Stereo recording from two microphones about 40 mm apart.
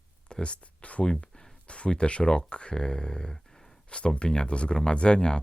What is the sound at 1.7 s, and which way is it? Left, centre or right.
Speech, left.